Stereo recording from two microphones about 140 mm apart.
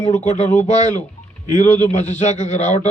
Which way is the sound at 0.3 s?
60° left (ahead or behind).